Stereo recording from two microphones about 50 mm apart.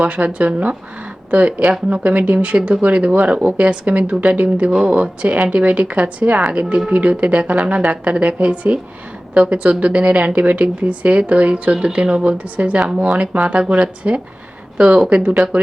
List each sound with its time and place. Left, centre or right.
0.1 s speech: right
14.8 s speech: right